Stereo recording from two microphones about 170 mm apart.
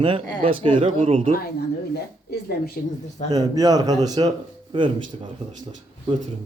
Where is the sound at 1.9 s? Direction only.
70° left (ahead or behind).